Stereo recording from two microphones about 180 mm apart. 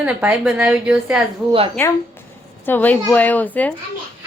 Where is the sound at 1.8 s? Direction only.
10° left (ahead or behind).